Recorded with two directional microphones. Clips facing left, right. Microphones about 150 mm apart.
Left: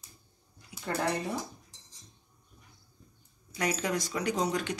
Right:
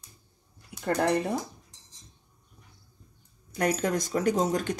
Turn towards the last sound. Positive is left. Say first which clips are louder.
# right 5 dB
turn(degrees=-45)  # may be behind; listen again after turning